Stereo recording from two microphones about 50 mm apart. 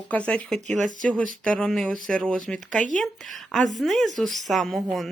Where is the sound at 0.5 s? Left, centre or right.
Centre.